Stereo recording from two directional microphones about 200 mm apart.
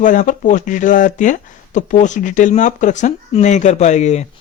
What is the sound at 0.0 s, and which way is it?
A man's voice, 40° left (ahead or behind).